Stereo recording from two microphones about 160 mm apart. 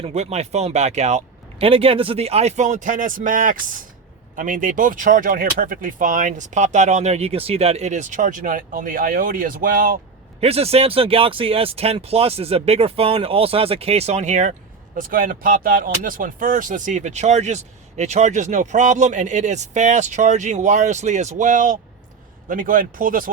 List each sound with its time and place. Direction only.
0.0 s speech: 40° right (ahead or behind); by 10.0 s 60° right (ahead or behind)
10.4 s speech: 40° right (ahead or behind)
14.9 s speech: 60° right (ahead or behind)